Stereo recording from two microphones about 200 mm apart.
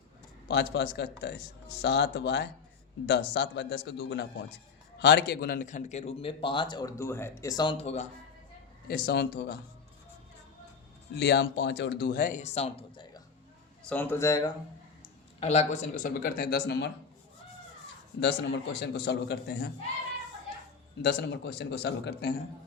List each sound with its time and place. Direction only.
0.4 s a man's voice: 55° left (ahead or behind); by 8.0 s 30° left (ahead or behind)
8.9 s speech: 50° left (ahead or behind)
11.2 s speech: 55° left (ahead or behind); by 13.2 s 25° left (ahead or behind)
13.8 s a man's voice: 5° left (ahead or behind)
15.4 s speech: 35° left (ahead or behind); by 16.9 s 55° left (ahead or behind)
18.2 s speech: 55° left (ahead or behind)
21.0 s speech: 55° left (ahead or behind)